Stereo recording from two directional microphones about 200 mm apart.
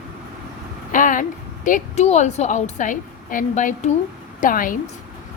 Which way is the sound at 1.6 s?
35° left (ahead or behind).